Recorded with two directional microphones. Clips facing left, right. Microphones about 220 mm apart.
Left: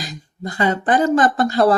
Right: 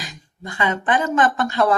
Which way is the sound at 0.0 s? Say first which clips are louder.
Left 6 dB; 35° left (ahead or behind).